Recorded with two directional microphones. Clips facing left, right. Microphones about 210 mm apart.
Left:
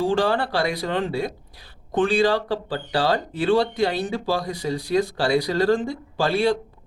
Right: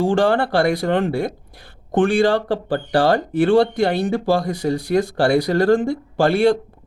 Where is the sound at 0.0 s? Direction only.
50° right (ahead or behind).